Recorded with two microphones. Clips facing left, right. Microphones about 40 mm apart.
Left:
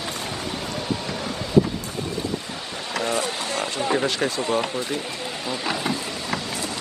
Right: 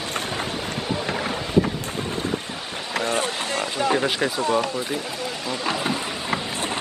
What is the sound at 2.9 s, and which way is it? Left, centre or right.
Vehicle, right.